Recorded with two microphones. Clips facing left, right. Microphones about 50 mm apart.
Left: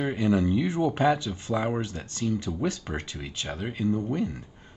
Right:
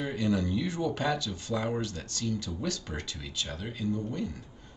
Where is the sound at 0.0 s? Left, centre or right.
Left.